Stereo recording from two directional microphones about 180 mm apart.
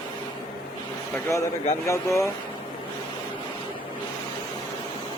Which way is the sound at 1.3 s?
15° left (ahead or behind).